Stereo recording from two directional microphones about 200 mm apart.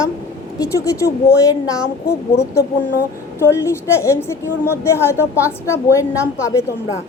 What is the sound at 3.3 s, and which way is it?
A woman's voice, 15° left (ahead or behind).